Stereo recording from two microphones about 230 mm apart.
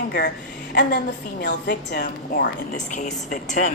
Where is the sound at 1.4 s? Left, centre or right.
Left.